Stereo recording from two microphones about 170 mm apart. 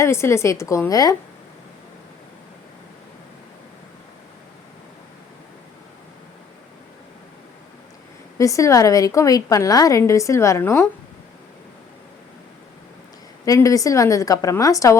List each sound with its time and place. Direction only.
0.0 s a woman's voice: 15° left (ahead or behind)
8.4 s a woman's voice: 20° left (ahead or behind)
13.4 s a woman's voice: 20° left (ahead or behind)